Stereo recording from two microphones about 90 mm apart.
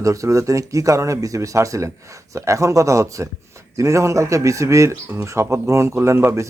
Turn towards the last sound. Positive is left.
turn(degrees=-25)  # may be behind; listen again after turning